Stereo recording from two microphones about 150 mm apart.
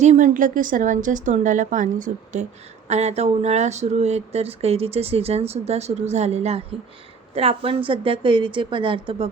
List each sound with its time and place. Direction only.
0.0 s a woman's voice: 50° right (ahead or behind)